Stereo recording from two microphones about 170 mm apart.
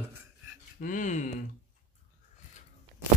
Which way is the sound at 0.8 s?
50° left (ahead or behind).